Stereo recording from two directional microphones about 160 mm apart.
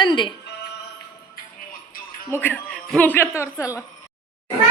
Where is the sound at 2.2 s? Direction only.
15° left (ahead or behind).